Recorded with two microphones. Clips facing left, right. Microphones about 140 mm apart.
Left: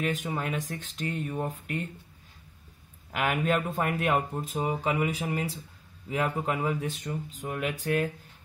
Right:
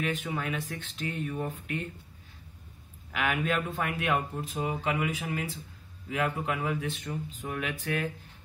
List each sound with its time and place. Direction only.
0.0 s speech: 40° left (ahead or behind)
3.1 s speech: 45° left (ahead or behind)